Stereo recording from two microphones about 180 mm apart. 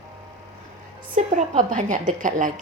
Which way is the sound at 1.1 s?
45° right (ahead or behind).